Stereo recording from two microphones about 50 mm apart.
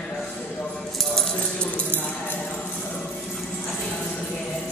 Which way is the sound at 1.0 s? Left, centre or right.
Centre.